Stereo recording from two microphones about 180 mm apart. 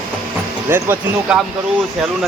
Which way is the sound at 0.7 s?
15° right (ahead or behind).